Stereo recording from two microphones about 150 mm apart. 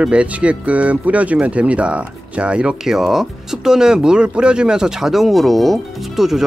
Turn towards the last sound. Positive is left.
turn(degrees=0)  # may be behind; listen again after turning